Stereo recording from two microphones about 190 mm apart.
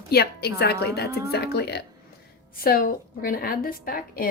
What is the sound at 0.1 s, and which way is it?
A woman's voice, 55° left (ahead or behind).